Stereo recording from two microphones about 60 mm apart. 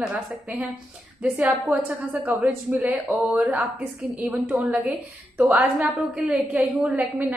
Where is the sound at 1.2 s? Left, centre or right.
Right.